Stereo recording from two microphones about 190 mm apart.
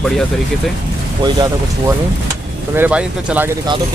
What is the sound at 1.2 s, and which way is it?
Speech, 20° right (ahead or behind).